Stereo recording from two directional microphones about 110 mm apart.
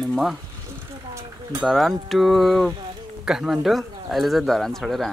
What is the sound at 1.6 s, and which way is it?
Speech, centre (ahead or behind).